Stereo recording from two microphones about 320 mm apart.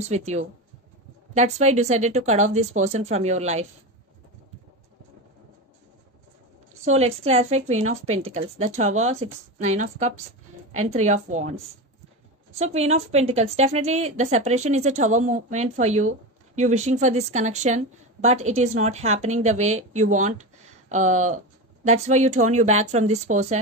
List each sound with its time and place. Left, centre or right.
0.1 s a woman's voice: right
6.8 s a woman's voice: centre
12.5 s a woman's voice: centre